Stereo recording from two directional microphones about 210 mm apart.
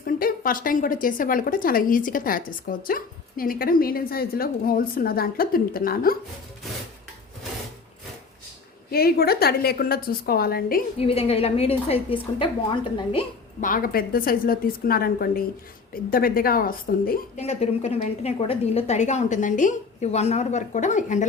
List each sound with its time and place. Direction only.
0.0 s a woman's voice: 45° left (ahead or behind)
8.9 s a woman's voice: 45° left (ahead or behind)
11.0 s a woman's voice: 25° left (ahead or behind)
13.6 s a woman's voice: 40° left (ahead or behind)